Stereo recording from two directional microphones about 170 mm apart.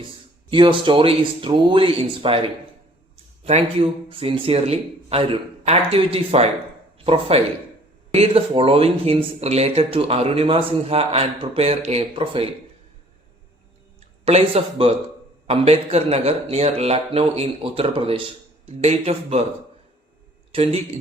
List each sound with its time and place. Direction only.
0.5 s speech: 30° right (ahead or behind)
14.3 s speech: 35° right (ahead or behind)
20.5 s speech: 35° right (ahead or behind)